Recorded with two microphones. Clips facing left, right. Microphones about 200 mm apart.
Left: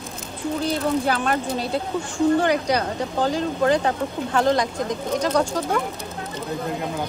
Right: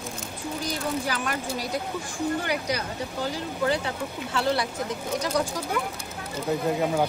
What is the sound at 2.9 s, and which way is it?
Speech, 70° left (ahead or behind).